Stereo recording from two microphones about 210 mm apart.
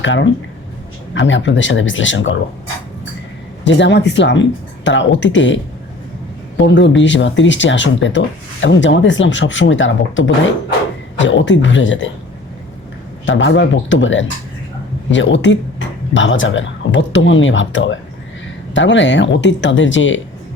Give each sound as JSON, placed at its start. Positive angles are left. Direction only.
{"t": 0.0, "sound": "speech", "side_deg": 60}
{"t": 3.6, "sound": "speech", "side_deg": 60}
{"t": 6.6, "sound": "speech", "side_deg": 60}
{"t": 13.2, "sound": "speech", "side_deg": 60}